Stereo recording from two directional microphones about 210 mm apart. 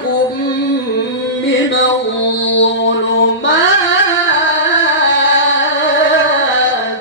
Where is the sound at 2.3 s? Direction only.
60° left (ahead or behind).